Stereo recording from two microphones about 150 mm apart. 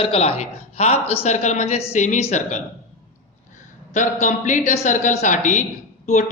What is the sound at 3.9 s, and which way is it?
Mantra, 55° left (ahead or behind).